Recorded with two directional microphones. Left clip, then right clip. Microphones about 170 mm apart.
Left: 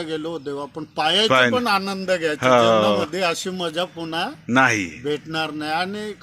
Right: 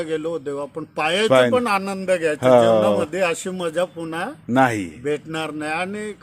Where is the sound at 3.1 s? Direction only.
40° right (ahead or behind).